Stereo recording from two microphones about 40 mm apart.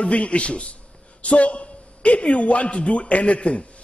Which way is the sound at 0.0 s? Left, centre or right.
Left.